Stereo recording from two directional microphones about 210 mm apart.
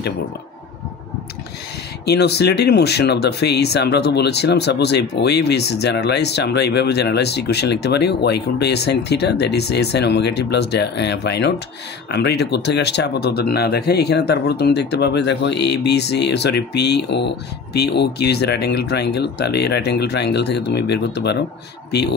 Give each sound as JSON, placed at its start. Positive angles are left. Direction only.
{"t": 2.0, "sound": "speech", "side_deg": 50}